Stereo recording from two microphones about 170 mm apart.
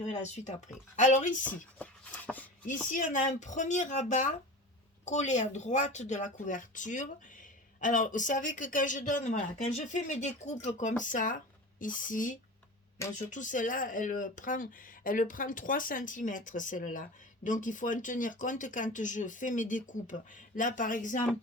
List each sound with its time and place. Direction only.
0.0 s speech: 45° left (ahead or behind)
1.5 s speech: 10° left (ahead or behind)
2.6 s speech: 50° left (ahead or behind)